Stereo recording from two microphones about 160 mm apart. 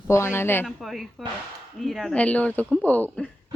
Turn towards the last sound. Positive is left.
turn(degrees=10)  # may be behind; listen again after turning